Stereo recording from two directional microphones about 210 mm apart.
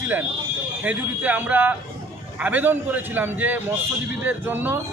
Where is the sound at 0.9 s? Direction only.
5° right (ahead or behind).